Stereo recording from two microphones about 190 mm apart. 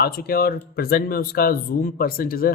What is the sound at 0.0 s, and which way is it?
Speech, 50° left (ahead or behind).